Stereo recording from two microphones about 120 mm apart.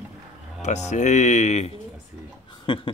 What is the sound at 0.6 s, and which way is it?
Speech, 75° left (ahead or behind).